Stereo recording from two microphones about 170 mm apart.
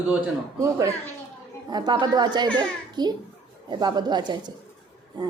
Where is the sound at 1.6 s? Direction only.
25° right (ahead or behind).